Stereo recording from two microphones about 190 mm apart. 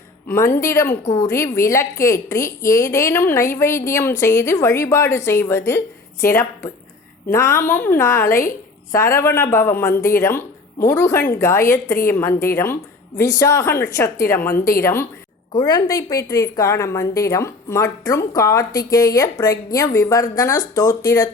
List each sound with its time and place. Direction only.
0.3 s a woman's voice: 15° left (ahead or behind)
8.3 s a woman's voice: 45° left (ahead or behind)
8.9 s a woman's voice: 15° left (ahead or behind)